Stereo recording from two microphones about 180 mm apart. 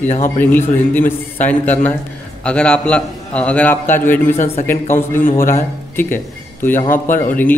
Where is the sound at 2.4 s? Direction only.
5° left (ahead or behind).